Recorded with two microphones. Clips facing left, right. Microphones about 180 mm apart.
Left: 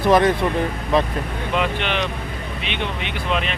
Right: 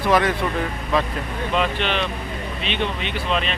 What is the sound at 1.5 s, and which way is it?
Speech, 15° left (ahead or behind).